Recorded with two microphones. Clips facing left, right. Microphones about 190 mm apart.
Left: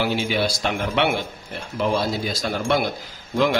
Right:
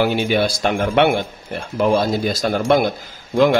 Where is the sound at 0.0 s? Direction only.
55° right (ahead or behind).